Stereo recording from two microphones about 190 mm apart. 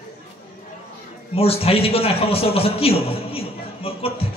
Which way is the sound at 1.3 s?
30° left (ahead or behind).